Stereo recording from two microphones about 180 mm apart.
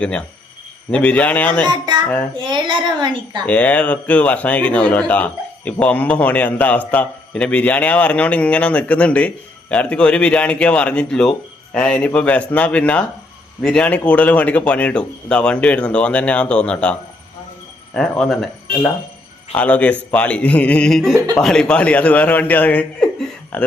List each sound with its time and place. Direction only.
0.0 s a man's voice: 5° left (ahead or behind)
1.6 s a woman's voice: 25° right (ahead or behind)
3.4 s a man's voice: 10° left (ahead or behind)